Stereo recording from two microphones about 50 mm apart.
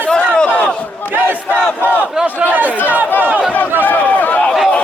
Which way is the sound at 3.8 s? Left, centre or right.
Left.